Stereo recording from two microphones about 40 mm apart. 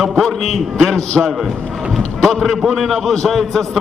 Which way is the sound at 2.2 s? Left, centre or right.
Centre.